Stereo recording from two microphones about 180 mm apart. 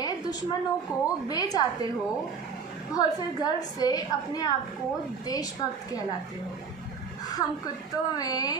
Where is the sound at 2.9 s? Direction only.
20° left (ahead or behind).